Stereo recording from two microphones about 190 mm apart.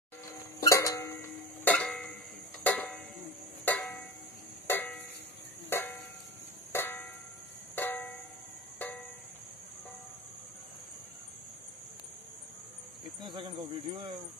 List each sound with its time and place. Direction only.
0.4 s cough: 15° left (ahead or behind)
1.6 s music: 5° left (ahead or behind)
2.6 s a sound: 5° left (ahead or behind)
4.6 s music: 10° left (ahead or behind)
5.7 s a sound: 10° left (ahead or behind)
7.7 s music: 10° left (ahead or behind)
13.2 s speech: 25° right (ahead or behind)